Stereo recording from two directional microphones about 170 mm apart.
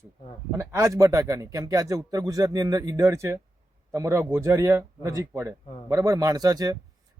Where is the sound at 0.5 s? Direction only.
15° right (ahead or behind).